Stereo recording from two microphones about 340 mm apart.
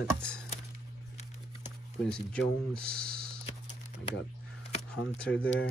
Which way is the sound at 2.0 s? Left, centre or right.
Centre.